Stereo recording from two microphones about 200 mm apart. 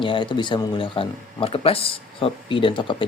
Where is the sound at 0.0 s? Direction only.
25° left (ahead or behind).